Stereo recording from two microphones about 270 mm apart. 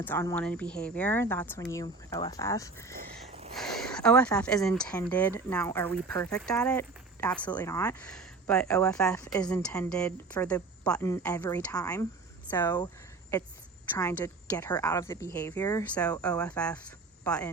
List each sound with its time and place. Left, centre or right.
0.0 s a woman's voice: centre
3.2 s a sound: right
3.5 s a woman's voice: centre
13.9 s a woman's voice: centre